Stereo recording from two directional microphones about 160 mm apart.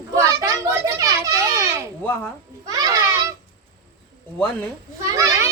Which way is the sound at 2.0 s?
15° left (ahead or behind).